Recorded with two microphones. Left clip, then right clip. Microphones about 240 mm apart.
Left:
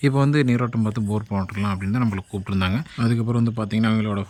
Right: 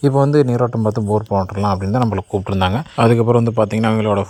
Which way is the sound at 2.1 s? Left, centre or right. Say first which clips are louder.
Right 9 dB; centre.